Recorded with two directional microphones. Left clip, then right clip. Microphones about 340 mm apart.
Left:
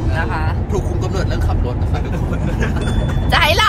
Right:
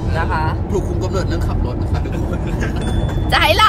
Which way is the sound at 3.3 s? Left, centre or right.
Centre.